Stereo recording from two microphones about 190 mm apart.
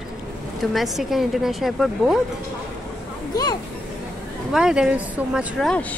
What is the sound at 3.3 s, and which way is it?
Speech, 20° left (ahead or behind).